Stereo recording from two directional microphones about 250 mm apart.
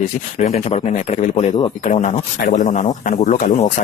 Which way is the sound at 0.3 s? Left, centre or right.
Left.